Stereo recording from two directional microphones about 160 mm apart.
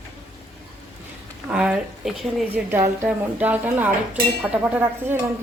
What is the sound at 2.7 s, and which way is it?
Speech, 15° right (ahead or behind).